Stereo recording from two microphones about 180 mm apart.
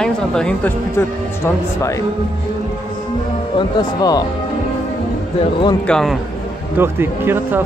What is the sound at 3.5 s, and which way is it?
Speech, 20° left (ahead or behind).